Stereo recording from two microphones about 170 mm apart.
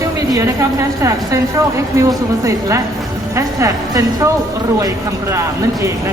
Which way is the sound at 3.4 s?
20° right (ahead or behind).